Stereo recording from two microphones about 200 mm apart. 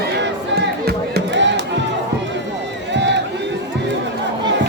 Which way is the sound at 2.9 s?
60° right (ahead or behind).